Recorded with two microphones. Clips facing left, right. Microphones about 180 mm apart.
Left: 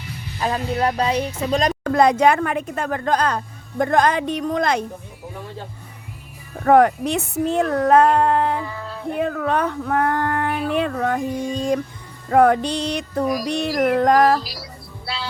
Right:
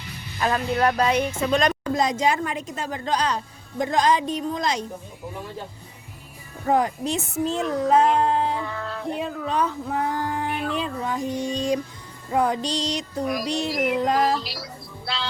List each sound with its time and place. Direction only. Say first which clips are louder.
0.3 s speech: even; 25° left (ahead or behind)
1.8 s speech: left 7 dB; 60° left (ahead or behind)
6.7 s speech: left 7 dB; 65° left (ahead or behind)
8.6 s music: even; 5° left (ahead or behind)
9.0 s female singing: left 7 dB; 55° left (ahead or behind)
10.8 s speech: left 6 dB; 60° left (ahead or behind)
15.0 s music: left 1 dB; 10° left (ahead or behind)